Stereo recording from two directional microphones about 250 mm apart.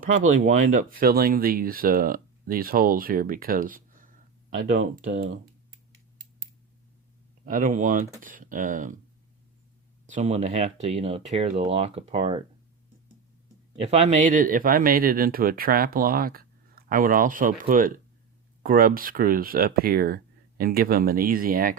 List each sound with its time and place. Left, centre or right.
0.0 s speech: right
7.4 s speech: right
10.1 s speech: right
13.8 s speech: right